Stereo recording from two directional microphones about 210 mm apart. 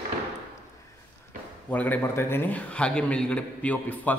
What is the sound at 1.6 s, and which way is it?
A man's voice, 10° left (ahead or behind).